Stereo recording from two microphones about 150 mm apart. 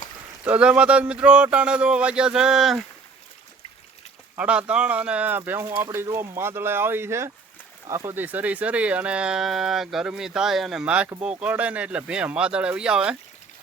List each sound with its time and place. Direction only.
0.4 s speech: 10° right (ahead or behind)
4.4 s speech: 5° right (ahead or behind)